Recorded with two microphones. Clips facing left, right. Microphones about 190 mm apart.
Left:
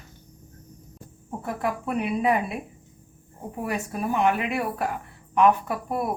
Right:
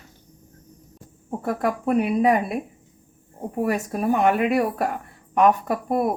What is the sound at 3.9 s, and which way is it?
Speech, 45° right (ahead or behind).